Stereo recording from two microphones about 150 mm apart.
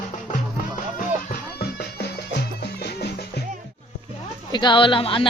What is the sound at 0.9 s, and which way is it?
Music, 75° left (ahead or behind).